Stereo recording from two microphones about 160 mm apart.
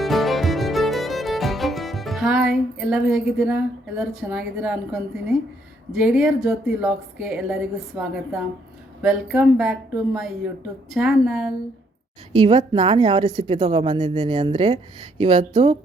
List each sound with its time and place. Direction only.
0.0 s music: centre (ahead or behind)
5.9 s a woman's voice: 5° right (ahead or behind)
12.3 s a woman's voice: 30° right (ahead or behind)